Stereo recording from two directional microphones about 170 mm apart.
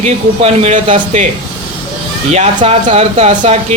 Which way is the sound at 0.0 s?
40° right (ahead or behind).